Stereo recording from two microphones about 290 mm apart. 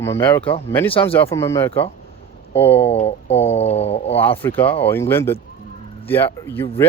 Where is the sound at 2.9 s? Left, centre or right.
Left.